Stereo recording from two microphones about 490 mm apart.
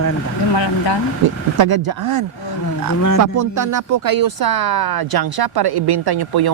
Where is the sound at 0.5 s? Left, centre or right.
Left.